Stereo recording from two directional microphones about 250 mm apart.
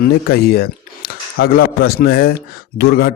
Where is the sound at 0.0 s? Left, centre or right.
Left.